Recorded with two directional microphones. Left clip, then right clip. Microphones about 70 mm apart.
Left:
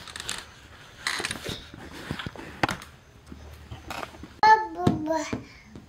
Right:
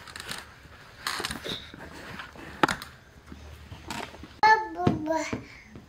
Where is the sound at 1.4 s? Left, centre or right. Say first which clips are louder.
Right 1 dB; centre.